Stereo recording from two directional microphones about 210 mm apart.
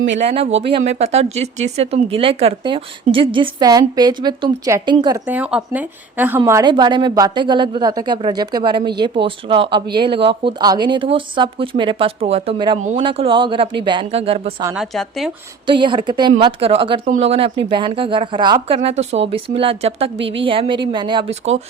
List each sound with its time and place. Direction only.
0.7 s a woman's voice: 30° right (ahead or behind)
14.8 s a woman's voice: centre (ahead or behind)
15.6 s a woman's voice: 25° right (ahead or behind)